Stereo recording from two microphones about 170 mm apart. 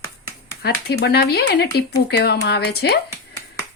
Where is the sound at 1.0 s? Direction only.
70° left (ahead or behind).